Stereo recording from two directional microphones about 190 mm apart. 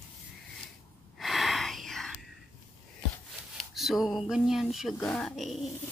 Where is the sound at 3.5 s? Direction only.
Centre (ahead or behind).